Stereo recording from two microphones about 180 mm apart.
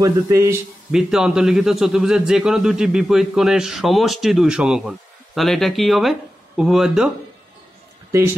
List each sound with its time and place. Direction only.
0.0 s speech: 15° right (ahead or behind)
0.9 s a man's voice: 5° right (ahead or behind)
8.1 s a man's voice: 15° right (ahead or behind)